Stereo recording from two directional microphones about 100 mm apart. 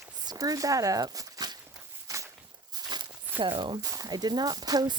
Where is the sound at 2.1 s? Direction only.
35° right (ahead or behind).